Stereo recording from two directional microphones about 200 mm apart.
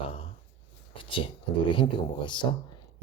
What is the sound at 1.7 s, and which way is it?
Speech, 25° left (ahead or behind).